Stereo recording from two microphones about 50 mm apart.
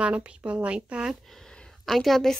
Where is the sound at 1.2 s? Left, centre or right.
Centre.